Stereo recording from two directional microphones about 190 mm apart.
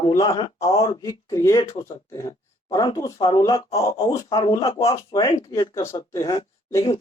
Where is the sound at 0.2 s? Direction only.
25° left (ahead or behind).